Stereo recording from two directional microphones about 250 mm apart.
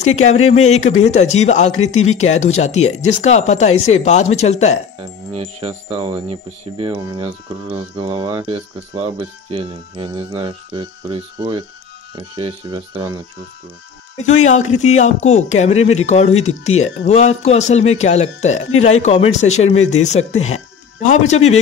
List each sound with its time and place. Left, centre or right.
0.0 s speech: left
5.3 s music: right
12.2 s speech: centre
14.2 s speech: left